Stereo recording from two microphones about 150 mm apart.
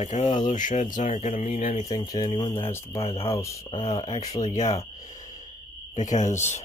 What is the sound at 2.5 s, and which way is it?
Speech, 15° left (ahead or behind).